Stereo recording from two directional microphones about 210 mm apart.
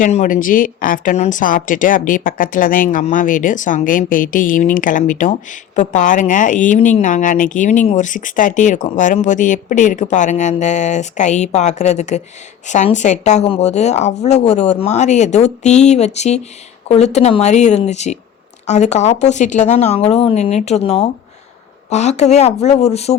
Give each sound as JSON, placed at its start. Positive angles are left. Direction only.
{"t": 0.0, "sound": "speech", "side_deg": 35}